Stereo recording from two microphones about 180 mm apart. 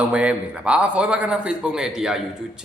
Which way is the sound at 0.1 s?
5° right (ahead or behind).